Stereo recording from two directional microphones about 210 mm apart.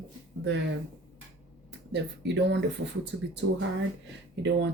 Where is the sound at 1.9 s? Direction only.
55° right (ahead or behind).